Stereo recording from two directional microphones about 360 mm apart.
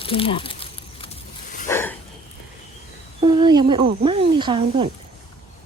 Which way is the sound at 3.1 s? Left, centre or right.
Centre.